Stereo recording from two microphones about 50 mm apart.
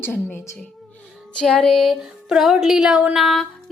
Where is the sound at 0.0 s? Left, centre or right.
Left.